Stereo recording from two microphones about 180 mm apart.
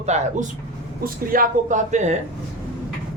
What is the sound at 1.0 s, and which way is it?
Speech, 50° right (ahead or behind).